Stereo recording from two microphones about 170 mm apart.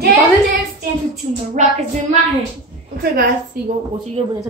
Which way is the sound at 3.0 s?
55° right (ahead or behind).